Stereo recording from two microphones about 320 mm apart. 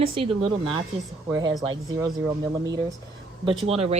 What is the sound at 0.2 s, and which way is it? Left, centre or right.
A woman's voice, centre.